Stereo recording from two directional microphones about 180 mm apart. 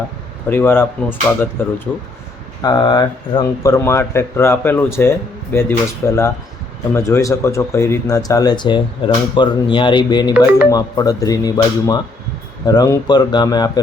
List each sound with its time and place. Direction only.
0.5 s speech: 10° left (ahead or behind)
2.6 s speech: 25° left (ahead or behind)
10.3 s speech: 10° right (ahead or behind)
10.7 s speech: 20° left (ahead or behind)